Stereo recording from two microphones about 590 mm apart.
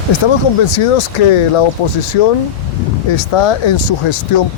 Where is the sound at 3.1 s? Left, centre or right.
Left.